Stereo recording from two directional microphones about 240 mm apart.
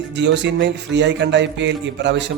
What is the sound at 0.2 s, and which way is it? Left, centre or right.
A man's voice, right.